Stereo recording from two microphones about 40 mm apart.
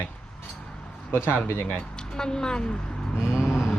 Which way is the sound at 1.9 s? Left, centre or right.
Centre.